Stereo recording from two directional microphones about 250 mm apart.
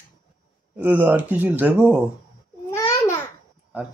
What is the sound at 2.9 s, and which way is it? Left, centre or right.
Babbling, centre.